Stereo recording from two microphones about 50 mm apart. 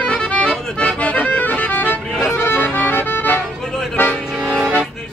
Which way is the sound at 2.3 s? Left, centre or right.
Left.